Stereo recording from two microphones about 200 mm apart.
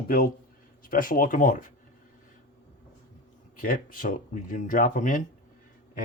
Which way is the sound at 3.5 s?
45° left (ahead or behind).